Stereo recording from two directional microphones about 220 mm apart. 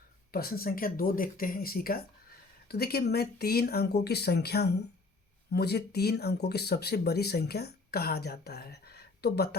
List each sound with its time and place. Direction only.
0.3 s speech: 45° left (ahead or behind)